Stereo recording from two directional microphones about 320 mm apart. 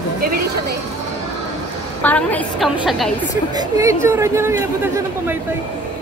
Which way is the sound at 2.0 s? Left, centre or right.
Centre.